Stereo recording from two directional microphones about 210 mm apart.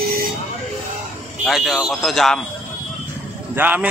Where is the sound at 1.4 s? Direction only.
Centre (ahead or behind).